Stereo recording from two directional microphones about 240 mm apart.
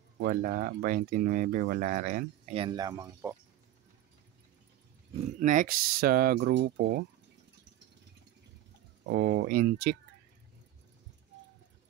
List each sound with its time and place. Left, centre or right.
0.2 s speech: right; by 3.3 s centre
5.4 s speech: right
9.0 s speech: right